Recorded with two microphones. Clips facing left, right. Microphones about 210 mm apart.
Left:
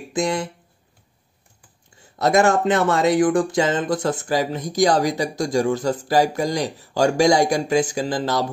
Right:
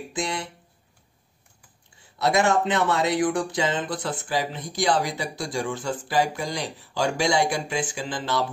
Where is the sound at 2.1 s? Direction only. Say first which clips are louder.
Left 4 dB; 45° left (ahead or behind).